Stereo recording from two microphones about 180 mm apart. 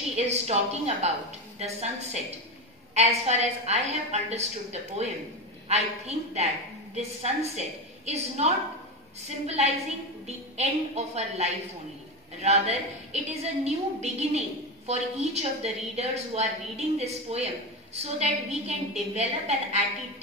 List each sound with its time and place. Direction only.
0.1 s a woman's voice: 35° right (ahead or behind)
5.7 s a woman's voice: 35° right (ahead or behind)